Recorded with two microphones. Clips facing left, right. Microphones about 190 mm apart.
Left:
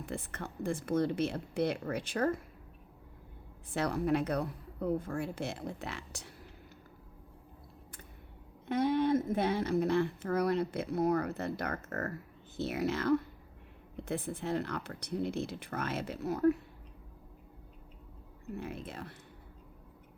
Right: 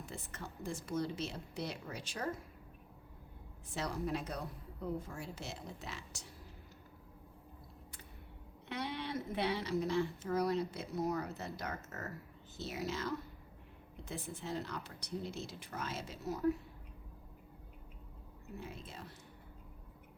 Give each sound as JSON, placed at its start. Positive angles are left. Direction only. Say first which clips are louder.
{"t": 0.0, "sound": "speech", "louder": "left 7 dB", "side_deg": 60}
{"t": 3.8, "sound": "speech", "louder": "left 8 dB", "side_deg": 60}
{"t": 8.6, "sound": "speech", "louder": "left 12 dB", "side_deg": 50}
{"t": 18.5, "sound": "speech", "louder": "left 7 dB", "side_deg": 60}